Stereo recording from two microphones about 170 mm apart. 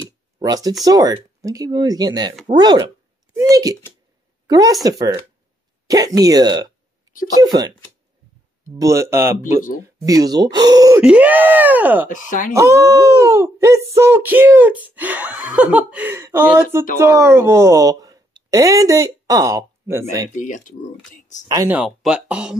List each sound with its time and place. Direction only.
0.4 s speech: 20° right (ahead or behind)
8.7 s speech: 20° right (ahead or behind)
11.0 s speech: 5° right (ahead or behind)
12.1 s speech: 50° left (ahead or behind)
12.5 s a woman's voice: 15° right (ahead or behind)
20.3 s speech: 50° left (ahead or behind)
21.6 s speech: 5° right (ahead or behind)